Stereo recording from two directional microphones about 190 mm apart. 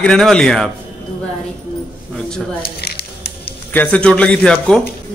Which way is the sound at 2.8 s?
55° left (ahead or behind).